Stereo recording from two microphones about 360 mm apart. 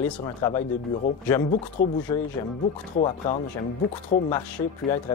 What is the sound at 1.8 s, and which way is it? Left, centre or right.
Speech, left.